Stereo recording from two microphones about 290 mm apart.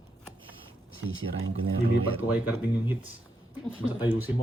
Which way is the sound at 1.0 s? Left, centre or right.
Right.